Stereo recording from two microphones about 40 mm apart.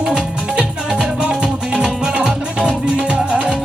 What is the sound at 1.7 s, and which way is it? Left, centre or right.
Music, centre.